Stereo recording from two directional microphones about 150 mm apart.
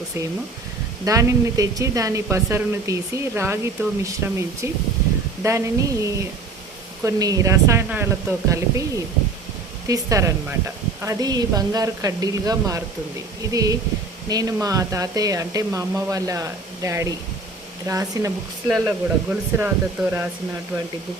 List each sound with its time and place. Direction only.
1.0 s speech: 20° right (ahead or behind)
9.8 s speech: 20° right (ahead or behind)
18.7 s speech: 5° right (ahead or behind)